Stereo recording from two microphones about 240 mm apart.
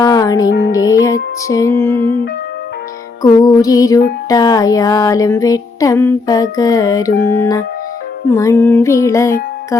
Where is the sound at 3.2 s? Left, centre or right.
Centre.